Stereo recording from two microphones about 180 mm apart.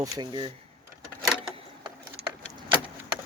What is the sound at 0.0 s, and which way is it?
Speech, 25° right (ahead or behind).